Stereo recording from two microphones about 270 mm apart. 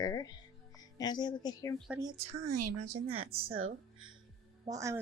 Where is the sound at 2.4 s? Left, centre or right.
Right.